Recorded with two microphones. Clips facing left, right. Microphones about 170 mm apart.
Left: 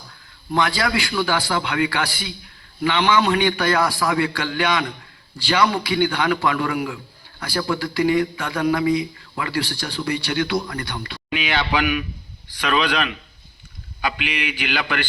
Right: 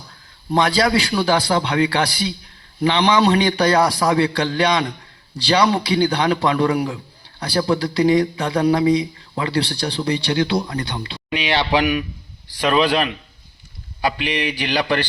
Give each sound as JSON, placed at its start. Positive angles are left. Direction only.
{"t": 0.5, "sound": "a man's voice", "side_deg": -35}